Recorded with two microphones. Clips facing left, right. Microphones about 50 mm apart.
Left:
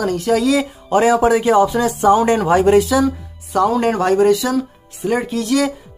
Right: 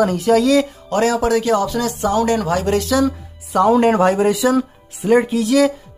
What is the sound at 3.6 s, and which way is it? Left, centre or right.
Speech, centre.